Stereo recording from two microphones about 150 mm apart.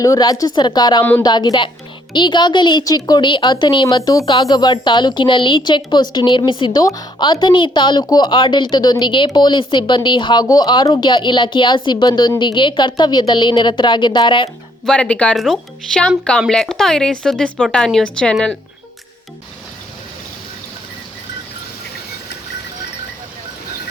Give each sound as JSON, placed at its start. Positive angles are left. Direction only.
{"t": 0.0, "sound": "a woman's voice", "side_deg": 25}
{"t": 14.8, "sound": "speech", "side_deg": 5}